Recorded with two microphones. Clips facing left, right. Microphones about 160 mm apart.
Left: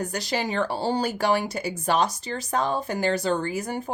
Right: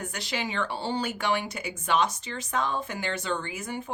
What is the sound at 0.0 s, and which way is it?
Speech, 40° left (ahead or behind).